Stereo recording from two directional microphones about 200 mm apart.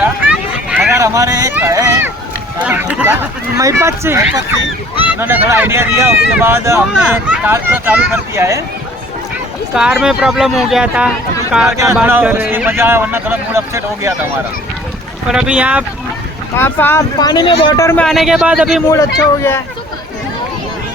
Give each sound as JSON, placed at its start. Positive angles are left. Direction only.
{"t": 0.0, "sound": "a sound", "side_deg": -5}
{"t": 2.6, "sound": "speech", "side_deg": -10}
{"t": 9.7, "sound": "speech", "side_deg": -5}
{"t": 15.3, "sound": "speech", "side_deg": -5}
{"t": 16.6, "sound": "speech", "side_deg": 10}
{"t": 18.0, "sound": "speech", "side_deg": 0}
{"t": 18.9, "sound": "speech", "side_deg": 15}